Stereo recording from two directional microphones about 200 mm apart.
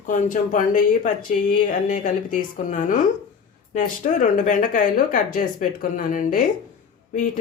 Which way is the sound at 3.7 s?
40° left (ahead or behind).